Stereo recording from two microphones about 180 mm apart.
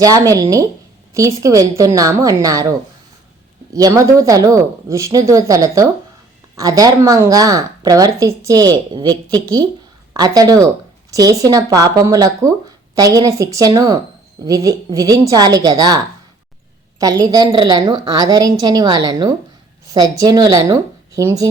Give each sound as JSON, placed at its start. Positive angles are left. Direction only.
{"t": 0.0, "sound": "speech", "side_deg": -20}
{"t": 17.0, "sound": "speech", "side_deg": -20}